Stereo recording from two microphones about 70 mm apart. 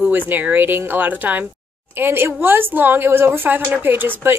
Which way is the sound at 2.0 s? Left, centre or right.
Right.